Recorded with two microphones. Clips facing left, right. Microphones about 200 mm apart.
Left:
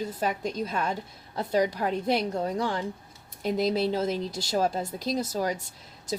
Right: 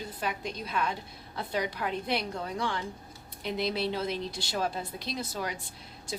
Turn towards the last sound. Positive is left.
turn(degrees=40)  # may be behind; listen again after turning